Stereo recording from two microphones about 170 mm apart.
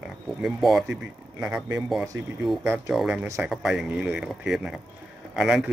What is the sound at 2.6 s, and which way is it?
Speech, 15° right (ahead or behind).